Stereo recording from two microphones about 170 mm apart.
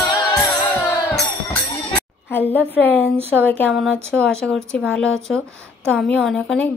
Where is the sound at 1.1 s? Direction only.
5° left (ahead or behind).